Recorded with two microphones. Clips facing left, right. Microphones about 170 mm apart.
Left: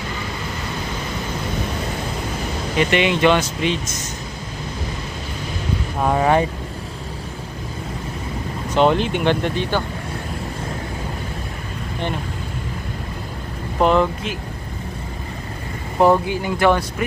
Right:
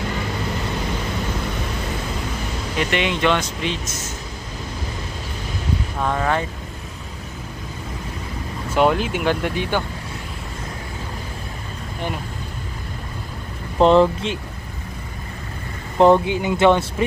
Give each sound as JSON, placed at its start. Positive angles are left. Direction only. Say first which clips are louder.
{"t": 2.8, "sound": "speech", "louder": "left 4 dB", "side_deg": 0}
{"t": 5.9, "sound": "speech", "louder": "left 5 dB", "side_deg": 15}
{"t": 8.6, "sound": "speech", "louder": "left 1 dB", "side_deg": -5}
{"t": 13.7, "sound": "speech", "louder": "right 3 dB", "side_deg": -30}
{"t": 16.0, "sound": "speech", "louder": "right 2 dB", "side_deg": -20}